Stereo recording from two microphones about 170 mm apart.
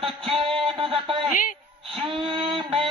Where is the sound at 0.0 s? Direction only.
30° right (ahead or behind).